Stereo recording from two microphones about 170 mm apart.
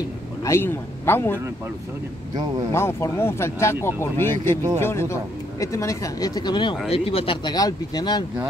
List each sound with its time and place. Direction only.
0.4 s a man's voice: 15° left (ahead or behind)
2.7 s speech: 15° left (ahead or behind)